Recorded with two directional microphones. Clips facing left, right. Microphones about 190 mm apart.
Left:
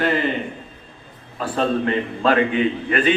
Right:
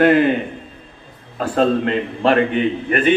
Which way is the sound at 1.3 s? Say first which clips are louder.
Right 4 dB; 40° right (ahead or behind).